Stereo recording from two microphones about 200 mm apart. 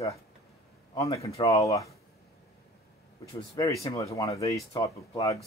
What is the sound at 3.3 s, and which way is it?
Speech, 20° left (ahead or behind).